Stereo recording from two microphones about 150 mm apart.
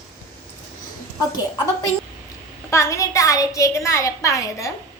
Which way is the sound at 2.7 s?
20° left (ahead or behind).